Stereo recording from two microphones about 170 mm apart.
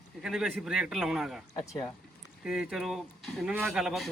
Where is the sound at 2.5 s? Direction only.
5° right (ahead or behind).